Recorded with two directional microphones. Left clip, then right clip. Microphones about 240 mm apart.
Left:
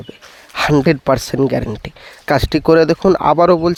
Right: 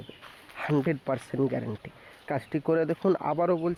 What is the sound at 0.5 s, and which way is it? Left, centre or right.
Speech, left.